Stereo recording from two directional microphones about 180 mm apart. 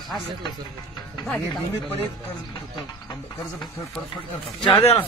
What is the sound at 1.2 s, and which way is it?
Speech, centre (ahead or behind).